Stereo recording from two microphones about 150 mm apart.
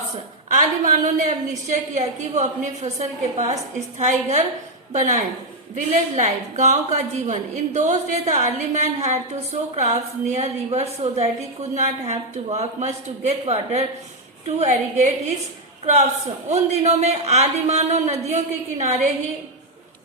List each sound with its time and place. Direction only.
0.4 s a woman's voice: 55° right (ahead or behind)
16.5 s a woman's voice: 45° right (ahead or behind)